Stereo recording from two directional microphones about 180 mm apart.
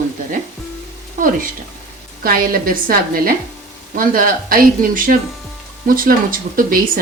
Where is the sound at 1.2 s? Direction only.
50° right (ahead or behind).